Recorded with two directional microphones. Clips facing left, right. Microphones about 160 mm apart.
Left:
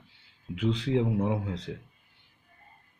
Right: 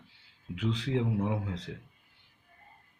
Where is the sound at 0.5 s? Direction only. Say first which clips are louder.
Left 4 dB; 25° left (ahead or behind).